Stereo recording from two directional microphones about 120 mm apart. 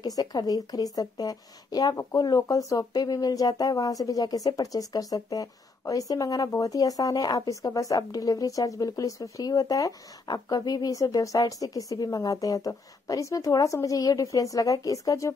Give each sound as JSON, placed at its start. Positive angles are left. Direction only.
{"t": 0.0, "sound": "a woman's voice", "side_deg": 30}